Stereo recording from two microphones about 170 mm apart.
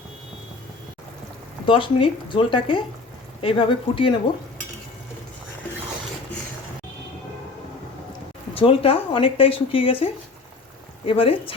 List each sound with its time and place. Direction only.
1.6 s speech: 30° left (ahead or behind)
8.5 s speech: 30° left (ahead or behind)
11.0 s speech: 35° left (ahead or behind)